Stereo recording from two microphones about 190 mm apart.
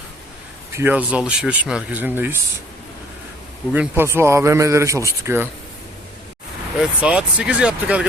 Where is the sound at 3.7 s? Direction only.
10° right (ahead or behind).